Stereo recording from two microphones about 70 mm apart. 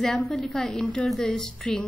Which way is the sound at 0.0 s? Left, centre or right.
Centre.